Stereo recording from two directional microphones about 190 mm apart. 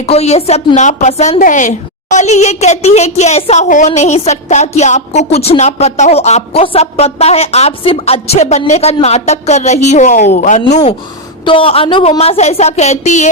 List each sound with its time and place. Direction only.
0.0 s speech: 35° left (ahead or behind)
11.4 s speech: 30° left (ahead or behind)